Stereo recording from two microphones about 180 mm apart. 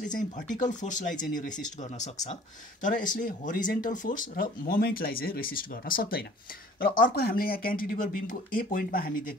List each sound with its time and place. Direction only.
0.0 s speech: 45° left (ahead or behind)